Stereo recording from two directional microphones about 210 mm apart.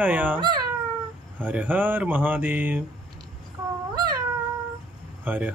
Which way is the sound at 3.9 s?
20° right (ahead or behind).